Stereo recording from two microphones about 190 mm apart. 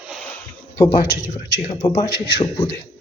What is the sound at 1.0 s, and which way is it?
A man's voice, 55° left (ahead or behind).